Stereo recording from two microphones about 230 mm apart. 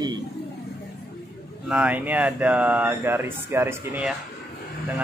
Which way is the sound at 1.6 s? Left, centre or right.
Centre.